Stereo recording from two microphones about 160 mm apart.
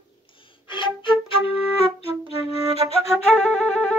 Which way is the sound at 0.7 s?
30° left (ahead or behind).